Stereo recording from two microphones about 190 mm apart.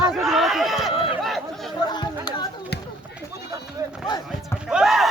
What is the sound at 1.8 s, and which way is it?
Chatter, 20° left (ahead or behind).